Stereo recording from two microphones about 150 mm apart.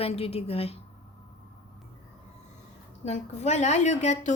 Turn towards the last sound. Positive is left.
turn(degrees=50)  # may be behind; listen again after turning